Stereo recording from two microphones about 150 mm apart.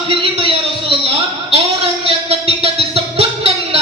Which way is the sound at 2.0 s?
40° right (ahead or behind).